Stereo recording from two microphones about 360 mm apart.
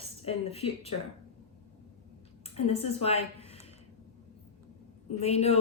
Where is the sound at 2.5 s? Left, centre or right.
Centre.